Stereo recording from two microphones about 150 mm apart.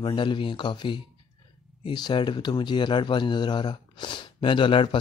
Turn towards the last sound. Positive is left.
turn(degrees=35)  # may be behind; listen again after turning